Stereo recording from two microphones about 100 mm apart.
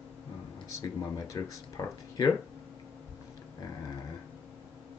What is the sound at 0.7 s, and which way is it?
Speech, 35° left (ahead or behind).